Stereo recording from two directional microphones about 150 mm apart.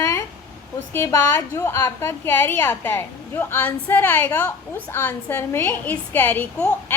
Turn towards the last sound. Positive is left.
turn(degrees=10)  # may be behind; listen again after turning